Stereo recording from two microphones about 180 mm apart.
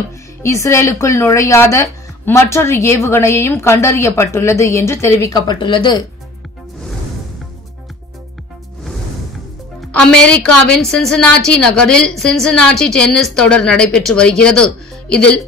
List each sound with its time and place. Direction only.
0.4 s speech: 15° left (ahead or behind)
9.8 s a woman's voice: 5° left (ahead or behind)